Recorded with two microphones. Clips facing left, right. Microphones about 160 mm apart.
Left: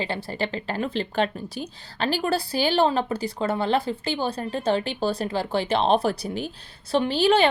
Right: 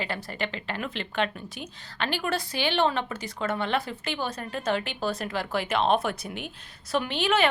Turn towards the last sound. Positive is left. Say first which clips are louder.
# left 6 dB
turn(degrees=35)  # may be behind; listen again after turning